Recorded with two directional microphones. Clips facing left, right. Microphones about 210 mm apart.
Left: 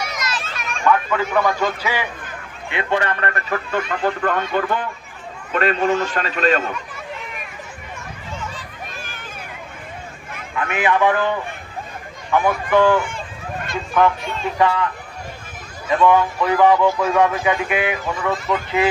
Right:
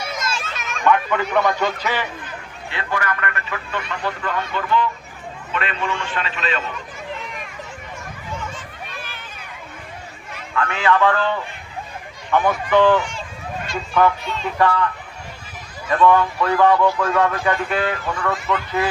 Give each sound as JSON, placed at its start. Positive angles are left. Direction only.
{"t": 0.0, "sound": "children playing", "side_deg": -25}
{"t": 0.9, "sound": "a man's voice", "side_deg": 5}
{"t": 2.6, "sound": "a man's voice", "side_deg": 20}
{"t": 8.5, "sound": "hubbub", "side_deg": 45}
{"t": 10.5, "sound": "speech", "side_deg": 20}
{"t": 13.0, "sound": "a man's voice", "side_deg": 55}
{"t": 14.6, "sound": "speech", "side_deg": 15}
{"t": 15.9, "sound": "speech", "side_deg": 15}